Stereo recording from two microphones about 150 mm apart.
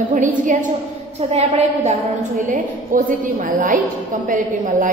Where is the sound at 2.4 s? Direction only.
65° right (ahead or behind).